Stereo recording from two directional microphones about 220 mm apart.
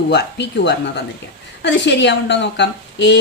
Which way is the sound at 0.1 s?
50° left (ahead or behind).